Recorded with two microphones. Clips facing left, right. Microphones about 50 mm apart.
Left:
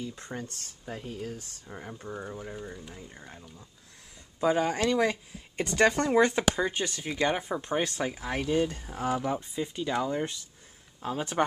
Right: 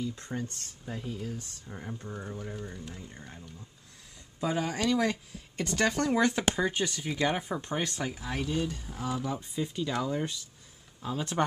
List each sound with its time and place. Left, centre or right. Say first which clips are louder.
0.1 s speech: right 2 dB; centre
4.4 s speech: left 5 dB; left
4.9 s speech: left 2 dB; centre
8.1 s speech: left 4 dB; left
9.4 s speech: even; centre
11.0 s speech: left 2 dB; centre